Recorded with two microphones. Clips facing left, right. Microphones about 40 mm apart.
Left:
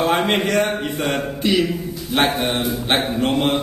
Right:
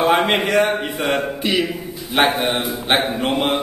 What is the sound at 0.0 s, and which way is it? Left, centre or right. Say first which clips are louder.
A man's voice: right 2 dB; centre.